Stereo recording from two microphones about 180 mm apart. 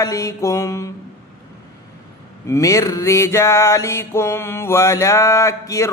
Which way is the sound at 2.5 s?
15° left (ahead or behind).